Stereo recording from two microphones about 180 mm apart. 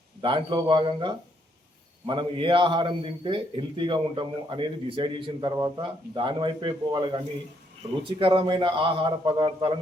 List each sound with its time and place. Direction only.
0.2 s a man's voice: 25° right (ahead or behind)